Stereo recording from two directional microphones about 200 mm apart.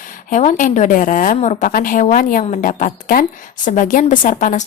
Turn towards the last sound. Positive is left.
turn(degrees=40)  # may be behind; listen again after turning